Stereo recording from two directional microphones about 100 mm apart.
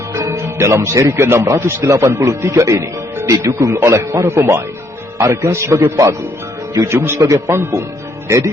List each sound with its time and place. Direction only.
0.1 s a man's voice: 30° right (ahead or behind)